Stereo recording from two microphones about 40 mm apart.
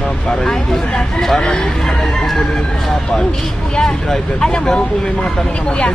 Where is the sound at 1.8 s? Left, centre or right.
Centre.